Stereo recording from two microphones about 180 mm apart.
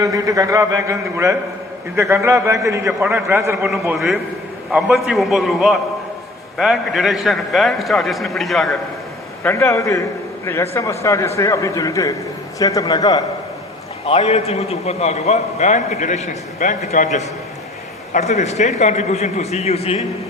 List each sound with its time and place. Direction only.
0.0 s a man's voice: 20° right (ahead or behind)
3.7 s a man's voice: centre (ahead or behind)
9.4 s a man's voice: 15° left (ahead or behind)
14.0 s a man's voice: 35° left (ahead or behind)